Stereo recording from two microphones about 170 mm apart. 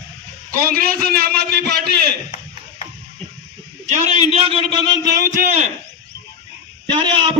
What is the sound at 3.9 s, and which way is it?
A man's voice, 45° right (ahead or behind).